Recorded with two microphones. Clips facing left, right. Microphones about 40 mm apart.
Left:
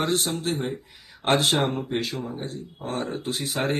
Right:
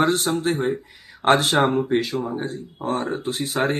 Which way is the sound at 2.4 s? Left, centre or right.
Right.